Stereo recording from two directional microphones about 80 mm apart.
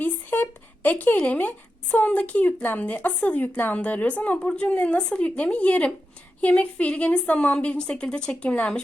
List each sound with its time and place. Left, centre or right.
0.0 s a woman's voice: left